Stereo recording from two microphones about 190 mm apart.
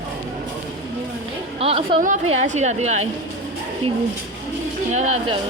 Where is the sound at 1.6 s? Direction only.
30° right (ahead or behind).